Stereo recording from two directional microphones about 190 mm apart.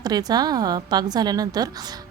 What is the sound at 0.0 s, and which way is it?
Speech, 20° right (ahead or behind).